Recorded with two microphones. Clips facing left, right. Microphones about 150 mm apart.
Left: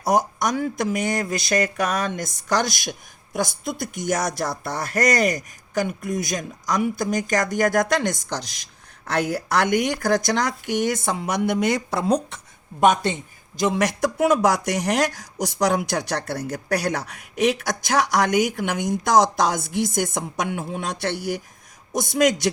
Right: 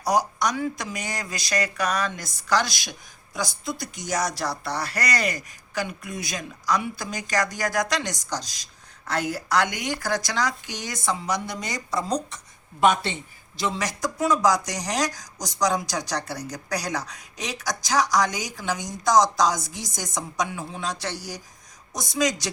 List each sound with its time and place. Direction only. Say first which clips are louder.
0.3 s a woman's voice: left 3 dB; 50° left (ahead or behind)
12.8 s a woman's voice: left 3 dB; 45° left (ahead or behind)
21.9 s a man's voice: left 7 dB; 25° left (ahead or behind)
22.2 s a woman's voice: left 5 dB; 55° left (ahead or behind)